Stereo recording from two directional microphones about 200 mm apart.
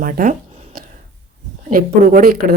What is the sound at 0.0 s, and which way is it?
Speech, 40° right (ahead or behind).